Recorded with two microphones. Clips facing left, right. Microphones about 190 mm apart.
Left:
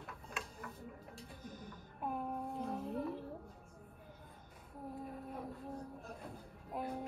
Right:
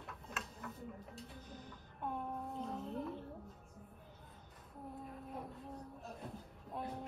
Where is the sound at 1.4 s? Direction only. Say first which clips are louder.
Left 2 dB; 50° left (ahead or behind).